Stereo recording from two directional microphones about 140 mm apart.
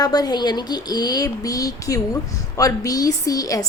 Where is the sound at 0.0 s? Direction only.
30° left (ahead or behind).